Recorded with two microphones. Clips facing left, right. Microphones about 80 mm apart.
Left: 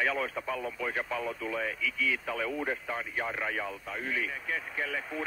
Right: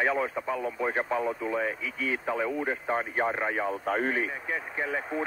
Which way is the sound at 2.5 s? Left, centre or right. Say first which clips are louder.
Right 3 dB; centre.